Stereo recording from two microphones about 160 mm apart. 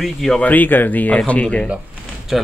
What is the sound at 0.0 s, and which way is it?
A man's voice, centre (ahead or behind).